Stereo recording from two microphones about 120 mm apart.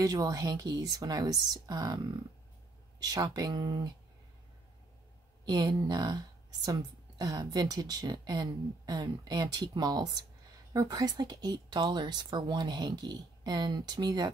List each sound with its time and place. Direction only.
0.0 s speech: 30° right (ahead or behind)
3.0 s speech: 35° right (ahead or behind)
5.4 s speech: 35° right (ahead or behind)